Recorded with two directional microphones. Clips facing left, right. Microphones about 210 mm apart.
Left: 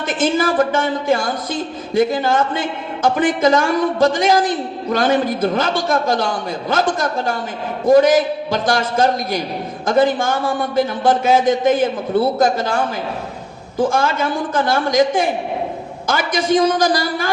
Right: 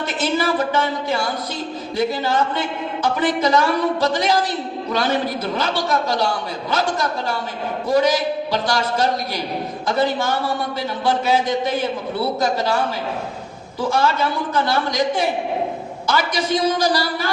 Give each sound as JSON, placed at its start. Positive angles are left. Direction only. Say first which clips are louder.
{"t": 0.2, "sound": "a woman's voice", "louder": "left 4 dB", "side_deg": 50}